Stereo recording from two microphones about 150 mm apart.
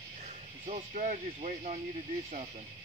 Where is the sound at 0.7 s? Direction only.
55° right (ahead or behind).